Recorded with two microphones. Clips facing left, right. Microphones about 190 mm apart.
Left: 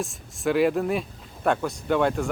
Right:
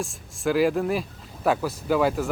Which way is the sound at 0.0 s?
Centre (ahead or behind).